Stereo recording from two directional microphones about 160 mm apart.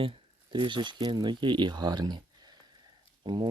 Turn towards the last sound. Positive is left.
turn(degrees=-30)  # may be behind; listen again after turning